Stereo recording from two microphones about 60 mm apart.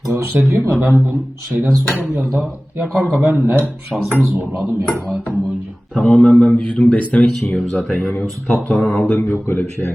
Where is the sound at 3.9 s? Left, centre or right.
Centre.